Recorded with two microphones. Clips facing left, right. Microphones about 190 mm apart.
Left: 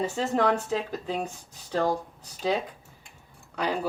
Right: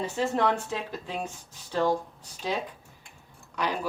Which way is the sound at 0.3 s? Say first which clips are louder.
Left 5 dB; 40° left (ahead or behind).